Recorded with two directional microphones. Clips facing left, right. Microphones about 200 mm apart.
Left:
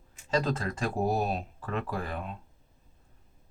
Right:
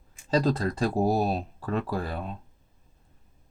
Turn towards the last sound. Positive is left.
turn(degrees=-35)  # may be behind; listen again after turning